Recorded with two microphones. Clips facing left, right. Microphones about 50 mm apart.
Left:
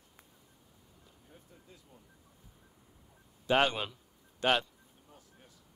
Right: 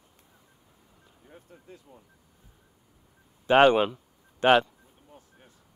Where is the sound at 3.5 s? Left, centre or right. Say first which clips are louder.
Right 10 dB; right.